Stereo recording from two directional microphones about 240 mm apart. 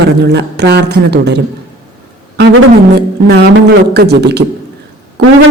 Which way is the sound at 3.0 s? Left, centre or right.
Right.